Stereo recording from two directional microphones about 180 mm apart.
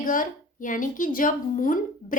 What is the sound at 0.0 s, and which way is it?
A woman's voice, 45° left (ahead or behind).